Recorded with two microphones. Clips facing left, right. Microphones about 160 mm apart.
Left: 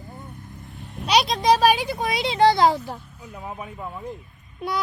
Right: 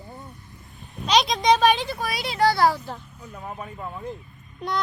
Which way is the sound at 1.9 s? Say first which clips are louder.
Left 4 dB; 20° left (ahead or behind).